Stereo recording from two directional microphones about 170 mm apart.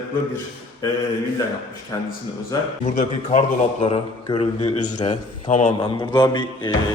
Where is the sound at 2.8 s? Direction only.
45° left (ahead or behind).